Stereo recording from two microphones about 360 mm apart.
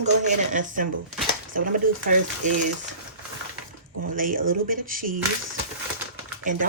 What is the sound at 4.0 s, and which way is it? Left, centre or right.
Speech, right.